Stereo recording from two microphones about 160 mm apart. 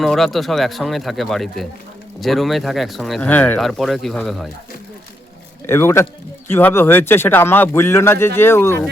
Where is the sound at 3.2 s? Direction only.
10° left (ahead or behind).